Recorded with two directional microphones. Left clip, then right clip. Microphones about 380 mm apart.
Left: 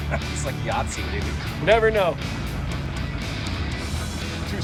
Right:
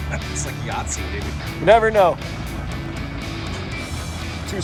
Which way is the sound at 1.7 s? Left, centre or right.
Centre.